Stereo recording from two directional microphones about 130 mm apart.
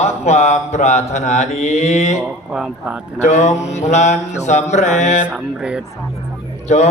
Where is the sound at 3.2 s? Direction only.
60° left (ahead or behind).